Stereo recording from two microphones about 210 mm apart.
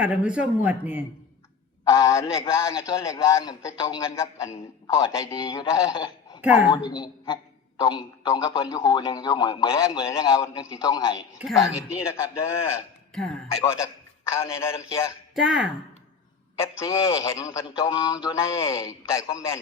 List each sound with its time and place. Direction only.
0.0 s a man's voice: 5° right (ahead or behind)
1.9 s a man's voice: 15° left (ahead or behind)
6.4 s a woman's voice: 5° right (ahead or behind)
6.9 s a man's voice: 20° left (ahead or behind)
11.3 s speech: centre (ahead or behind)
11.6 s a man's voice: 15° left (ahead or behind)
15.4 s speech: 5° right (ahead or behind)
16.6 s a man's voice: 15° left (ahead or behind)